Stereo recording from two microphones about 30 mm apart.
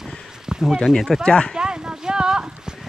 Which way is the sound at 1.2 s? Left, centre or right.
Left.